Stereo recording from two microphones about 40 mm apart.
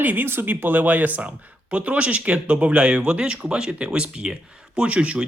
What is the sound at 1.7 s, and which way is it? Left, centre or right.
Speech, right.